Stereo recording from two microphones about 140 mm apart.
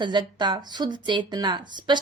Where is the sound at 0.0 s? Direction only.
35° right (ahead or behind).